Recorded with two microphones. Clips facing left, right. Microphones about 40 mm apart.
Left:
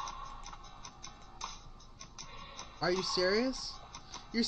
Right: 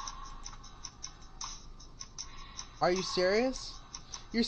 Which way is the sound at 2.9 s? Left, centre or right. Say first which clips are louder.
Even; right.